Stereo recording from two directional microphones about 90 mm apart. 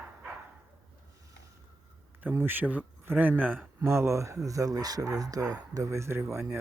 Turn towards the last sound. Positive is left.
turn(degrees=-30)  # may be behind; listen again after turning